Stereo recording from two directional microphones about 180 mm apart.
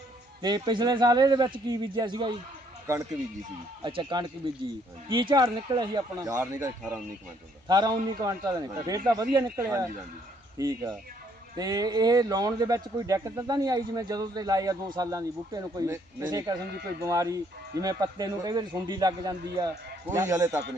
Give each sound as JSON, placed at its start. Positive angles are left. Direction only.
{"t": 0.4, "sound": "a man's voice", "side_deg": -25}
{"t": 3.8, "sound": "a man's voice", "side_deg": -25}